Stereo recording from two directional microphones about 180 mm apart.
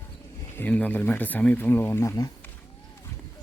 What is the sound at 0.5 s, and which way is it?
Speech, 10° left (ahead or behind).